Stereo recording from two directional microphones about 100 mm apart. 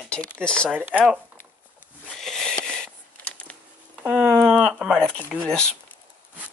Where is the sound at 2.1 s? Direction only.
5° left (ahead or behind).